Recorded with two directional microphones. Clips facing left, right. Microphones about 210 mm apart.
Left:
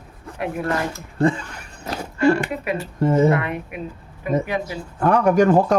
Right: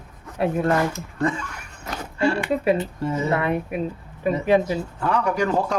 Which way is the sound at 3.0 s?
50° left (ahead or behind).